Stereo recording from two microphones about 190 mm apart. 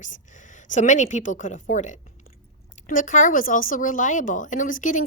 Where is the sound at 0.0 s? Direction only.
40° left (ahead or behind).